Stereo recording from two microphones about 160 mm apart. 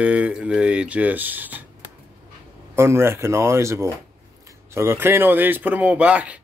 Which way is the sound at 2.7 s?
15° right (ahead or behind).